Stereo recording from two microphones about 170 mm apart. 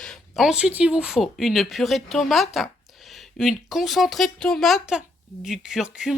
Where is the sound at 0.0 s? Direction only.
Centre (ahead or behind).